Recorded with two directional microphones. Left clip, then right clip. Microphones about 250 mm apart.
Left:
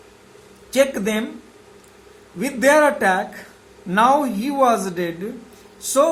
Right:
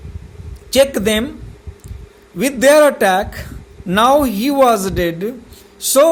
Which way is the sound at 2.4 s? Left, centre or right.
Right.